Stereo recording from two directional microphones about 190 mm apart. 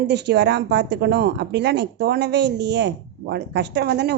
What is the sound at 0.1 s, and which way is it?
Speech, 65° right (ahead or behind).